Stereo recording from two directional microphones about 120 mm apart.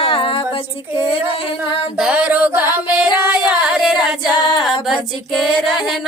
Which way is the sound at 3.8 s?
5° right (ahead or behind).